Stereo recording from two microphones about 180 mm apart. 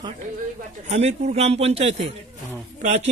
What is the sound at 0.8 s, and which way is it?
A man's voice, 35° right (ahead or behind).